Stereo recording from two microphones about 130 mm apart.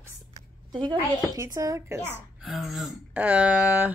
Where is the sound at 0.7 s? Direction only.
35° right (ahead or behind).